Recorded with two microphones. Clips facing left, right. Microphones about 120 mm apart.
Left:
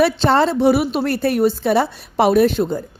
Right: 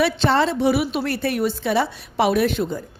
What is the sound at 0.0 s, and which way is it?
A woman's voice, 40° left (ahead or behind).